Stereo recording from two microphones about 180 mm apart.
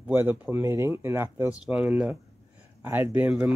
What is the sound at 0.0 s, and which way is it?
Speech, 10° right (ahead or behind).